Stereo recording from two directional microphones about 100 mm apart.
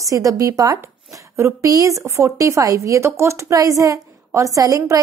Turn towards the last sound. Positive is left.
turn(degrees=-35)  # may be behind; listen again after turning